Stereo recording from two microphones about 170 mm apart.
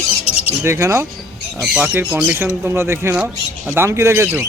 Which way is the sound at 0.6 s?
15° right (ahead or behind).